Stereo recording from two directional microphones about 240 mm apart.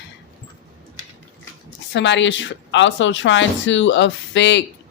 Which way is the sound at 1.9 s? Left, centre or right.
Left.